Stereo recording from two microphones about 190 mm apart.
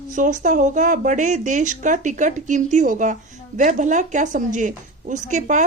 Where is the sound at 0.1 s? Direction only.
40° right (ahead or behind).